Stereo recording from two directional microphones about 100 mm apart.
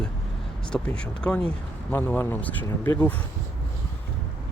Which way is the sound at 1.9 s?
25° left (ahead or behind).